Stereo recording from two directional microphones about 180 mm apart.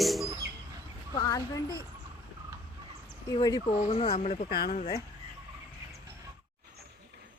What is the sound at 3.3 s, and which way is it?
Speech, 20° left (ahead or behind).